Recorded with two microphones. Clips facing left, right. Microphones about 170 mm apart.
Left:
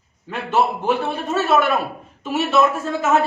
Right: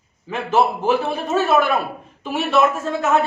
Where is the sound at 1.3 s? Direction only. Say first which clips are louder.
Right 1 dB; centre (ahead or behind).